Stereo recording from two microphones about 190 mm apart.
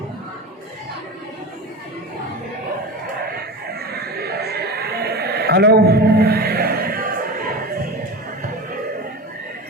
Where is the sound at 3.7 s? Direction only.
55° right (ahead or behind).